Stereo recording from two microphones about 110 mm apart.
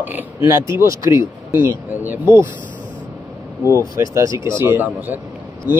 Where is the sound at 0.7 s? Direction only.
25° right (ahead or behind).